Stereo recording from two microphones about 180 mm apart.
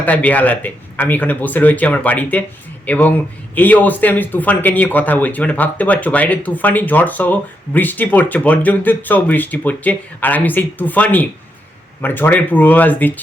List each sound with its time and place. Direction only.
0.0 s speech: 10° left (ahead or behind)